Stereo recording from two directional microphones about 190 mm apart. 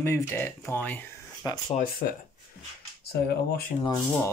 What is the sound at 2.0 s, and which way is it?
Speech, 50° left (ahead or behind).